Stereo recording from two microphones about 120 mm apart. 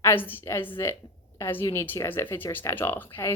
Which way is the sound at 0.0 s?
20° left (ahead or behind).